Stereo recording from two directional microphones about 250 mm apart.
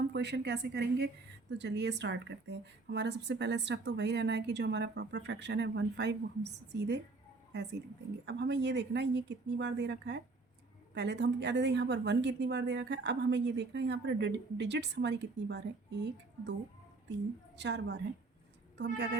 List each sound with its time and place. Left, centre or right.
0.1 s a woman's voice: right
17.6 s speech: right